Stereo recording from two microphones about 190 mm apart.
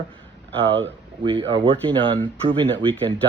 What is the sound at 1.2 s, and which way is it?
Speech, 25° right (ahead or behind).